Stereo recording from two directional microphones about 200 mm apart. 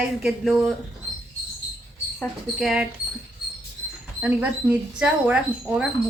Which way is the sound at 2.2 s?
Centre (ahead or behind).